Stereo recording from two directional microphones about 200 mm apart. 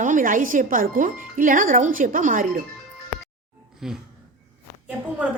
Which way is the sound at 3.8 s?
Centre (ahead or behind).